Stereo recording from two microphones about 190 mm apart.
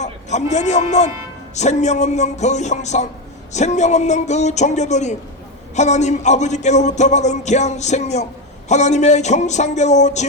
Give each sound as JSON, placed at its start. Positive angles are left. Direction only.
{"t": 0.0, "sound": "a man's voice", "side_deg": 35}
{"t": 1.5, "sound": "music", "side_deg": 35}